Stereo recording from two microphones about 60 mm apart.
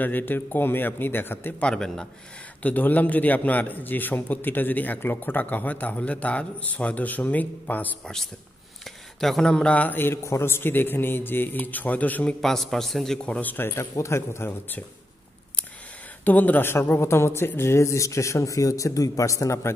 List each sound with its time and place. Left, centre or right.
0.0 s speech: left
1.6 s a man's voice: centre
2.6 s a man's voice: left
8.8 s a sound: centre
9.5 s a man's voice: centre
9.9 s speech: left
12.4 s a man's voice: centre
13.4 s speech: left
13.9 s speech: left
16.3 s a man's voice: left
16.7 s a man's voice: left